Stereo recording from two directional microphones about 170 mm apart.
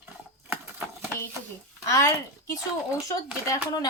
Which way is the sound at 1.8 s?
15° left (ahead or behind).